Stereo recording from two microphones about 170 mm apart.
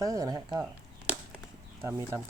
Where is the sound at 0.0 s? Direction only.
20° right (ahead or behind).